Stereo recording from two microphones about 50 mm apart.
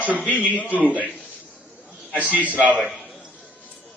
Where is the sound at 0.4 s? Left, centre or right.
Left.